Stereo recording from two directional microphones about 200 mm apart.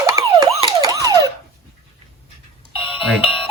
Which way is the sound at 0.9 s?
15° right (ahead or behind).